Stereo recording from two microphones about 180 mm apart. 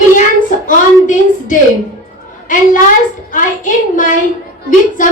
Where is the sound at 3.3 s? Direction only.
45° left (ahead or behind).